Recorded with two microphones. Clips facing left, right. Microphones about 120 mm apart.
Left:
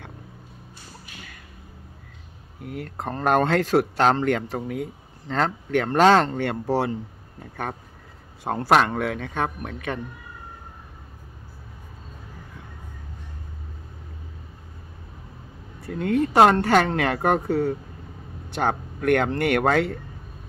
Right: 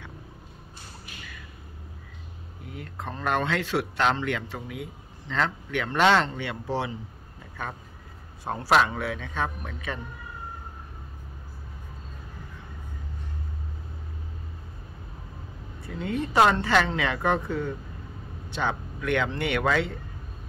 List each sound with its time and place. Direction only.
2.6 s speech: 55° left (ahead or behind)
8.5 s speech: 60° left (ahead or behind)
15.9 s speech: 55° left (ahead or behind)